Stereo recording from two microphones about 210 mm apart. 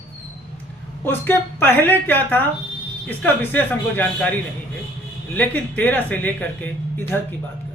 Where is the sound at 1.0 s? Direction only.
10° left (ahead or behind).